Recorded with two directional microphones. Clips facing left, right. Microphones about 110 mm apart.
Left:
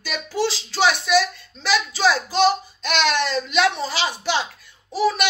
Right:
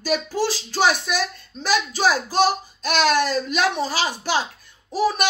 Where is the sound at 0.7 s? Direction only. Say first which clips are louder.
Left 3 dB; 15° right (ahead or behind).